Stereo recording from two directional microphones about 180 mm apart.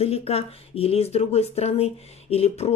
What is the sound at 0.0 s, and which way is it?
Speech, 35° left (ahead or behind).